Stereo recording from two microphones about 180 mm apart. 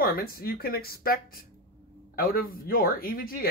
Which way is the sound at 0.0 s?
55° left (ahead or behind).